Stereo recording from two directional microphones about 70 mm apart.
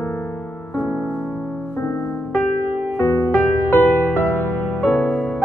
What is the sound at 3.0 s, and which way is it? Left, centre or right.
Music, left.